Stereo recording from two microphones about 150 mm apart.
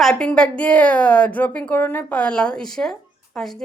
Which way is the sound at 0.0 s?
5° left (ahead or behind).